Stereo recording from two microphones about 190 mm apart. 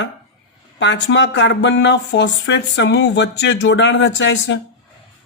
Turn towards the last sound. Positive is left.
turn(degrees=75)  # may be behind; listen again after turning